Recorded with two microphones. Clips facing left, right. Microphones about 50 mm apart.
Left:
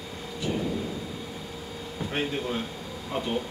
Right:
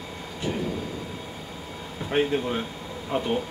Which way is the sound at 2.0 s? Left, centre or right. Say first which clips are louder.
Right 3 dB; right.